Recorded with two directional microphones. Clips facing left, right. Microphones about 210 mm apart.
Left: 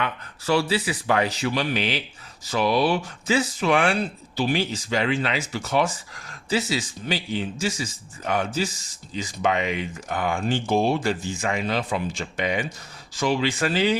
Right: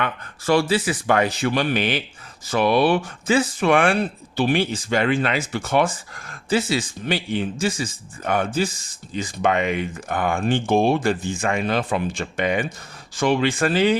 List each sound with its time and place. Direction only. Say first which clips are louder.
0.0 s speech: right 3 dB; 50° right (ahead or behind)